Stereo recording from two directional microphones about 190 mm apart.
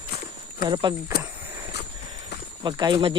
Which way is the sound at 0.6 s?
25° right (ahead or behind).